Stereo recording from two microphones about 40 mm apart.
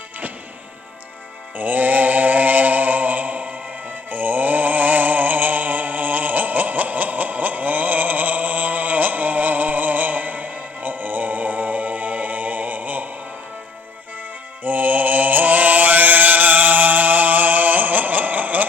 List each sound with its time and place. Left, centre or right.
1.5 s mantra: right
14.6 s mantra: right